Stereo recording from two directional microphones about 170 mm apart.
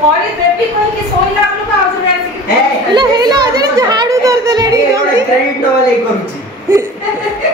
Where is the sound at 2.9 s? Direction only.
25° right (ahead or behind).